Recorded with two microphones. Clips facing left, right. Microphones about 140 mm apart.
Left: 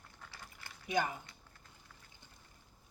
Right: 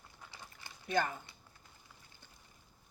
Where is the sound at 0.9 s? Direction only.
10° left (ahead or behind).